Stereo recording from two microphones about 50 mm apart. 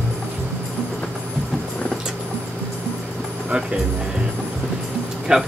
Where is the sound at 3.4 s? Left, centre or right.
Right.